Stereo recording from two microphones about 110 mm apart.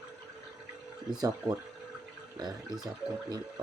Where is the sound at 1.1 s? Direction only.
35° right (ahead or behind).